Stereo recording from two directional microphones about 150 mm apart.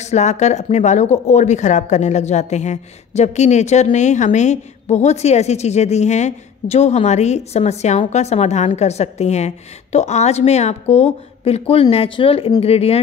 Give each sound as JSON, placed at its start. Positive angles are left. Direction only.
{"t": 0.0, "sound": "speech", "side_deg": 50}